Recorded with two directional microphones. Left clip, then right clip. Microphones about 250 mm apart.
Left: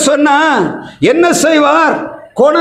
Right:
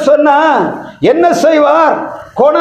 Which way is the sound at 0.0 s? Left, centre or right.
Left.